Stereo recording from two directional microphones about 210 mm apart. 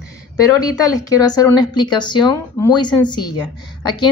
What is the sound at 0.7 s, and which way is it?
A woman's voice, 15° left (ahead or behind).